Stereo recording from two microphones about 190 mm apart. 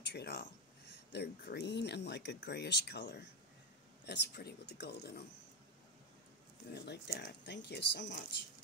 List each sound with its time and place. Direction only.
0.1 s speech: 60° left (ahead or behind)
6.7 s speech: 60° left (ahead or behind)